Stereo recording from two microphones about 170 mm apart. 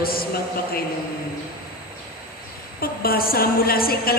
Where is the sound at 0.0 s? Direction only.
60° left (ahead or behind).